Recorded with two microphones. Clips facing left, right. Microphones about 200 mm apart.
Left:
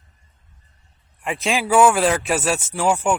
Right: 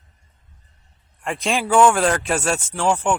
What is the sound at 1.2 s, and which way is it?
Speech, 5° left (ahead or behind).